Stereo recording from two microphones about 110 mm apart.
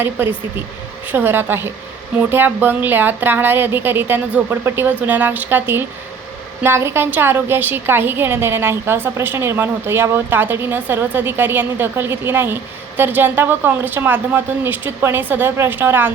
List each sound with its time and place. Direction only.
0.2 s a woman's voice: 15° right (ahead or behind)